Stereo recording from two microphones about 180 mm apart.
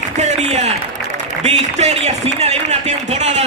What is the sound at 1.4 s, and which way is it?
A man's voice, 35° right (ahead or behind).